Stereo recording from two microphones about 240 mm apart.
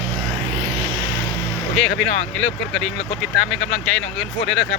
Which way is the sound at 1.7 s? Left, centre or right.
Centre.